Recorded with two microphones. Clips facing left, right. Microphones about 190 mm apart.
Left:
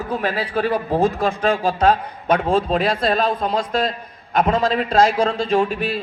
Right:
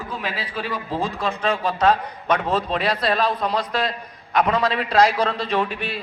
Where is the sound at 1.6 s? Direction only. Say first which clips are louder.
Left 3 dB; 30° left (ahead or behind).